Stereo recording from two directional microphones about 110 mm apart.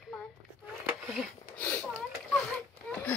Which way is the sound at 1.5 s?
20° left (ahead or behind).